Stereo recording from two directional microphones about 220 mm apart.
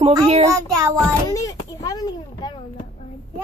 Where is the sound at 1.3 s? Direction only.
15° left (ahead or behind).